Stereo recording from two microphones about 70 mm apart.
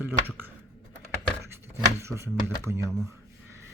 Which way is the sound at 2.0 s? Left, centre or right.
Right.